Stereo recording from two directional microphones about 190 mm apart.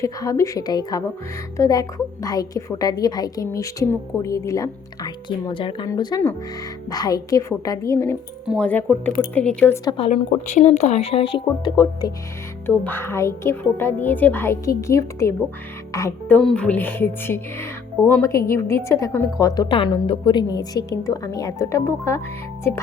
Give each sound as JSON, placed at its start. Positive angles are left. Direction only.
{"t": 0.0, "sound": "a woman's voice", "side_deg": 15}
{"t": 10.0, "sound": "speech", "side_deg": 35}
{"t": 12.6, "sound": "speech", "side_deg": 10}
{"t": 16.4, "sound": "speech", "side_deg": 5}